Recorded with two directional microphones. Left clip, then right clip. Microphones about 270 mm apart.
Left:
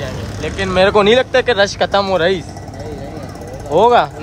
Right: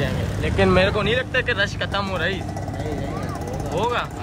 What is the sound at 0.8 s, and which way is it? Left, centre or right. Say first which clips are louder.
Speech: left 10 dB; left.